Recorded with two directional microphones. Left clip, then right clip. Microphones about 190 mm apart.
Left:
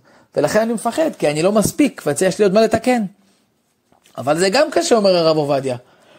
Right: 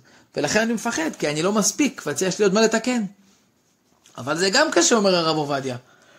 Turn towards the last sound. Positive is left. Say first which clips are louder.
# left 7 dB
turn(degrees=35)  # may be behind; listen again after turning